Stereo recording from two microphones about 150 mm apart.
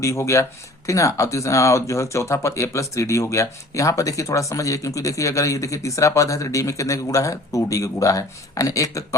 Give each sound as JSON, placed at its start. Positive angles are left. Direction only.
{"t": 0.0, "sound": "speech", "side_deg": 20}